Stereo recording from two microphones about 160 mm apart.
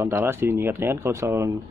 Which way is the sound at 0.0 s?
15° right (ahead or behind).